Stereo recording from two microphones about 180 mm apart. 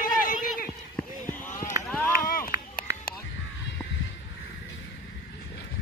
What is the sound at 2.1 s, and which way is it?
Chop, 50° left (ahead or behind).